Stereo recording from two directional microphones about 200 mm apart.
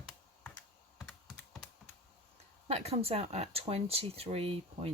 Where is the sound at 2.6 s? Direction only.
30° right (ahead or behind).